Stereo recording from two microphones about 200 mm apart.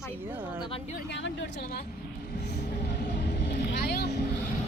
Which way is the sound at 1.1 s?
60° left (ahead or behind).